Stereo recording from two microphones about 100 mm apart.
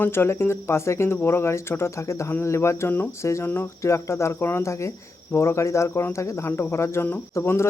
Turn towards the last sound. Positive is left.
turn(degrees=25)  # may be behind; listen again after turning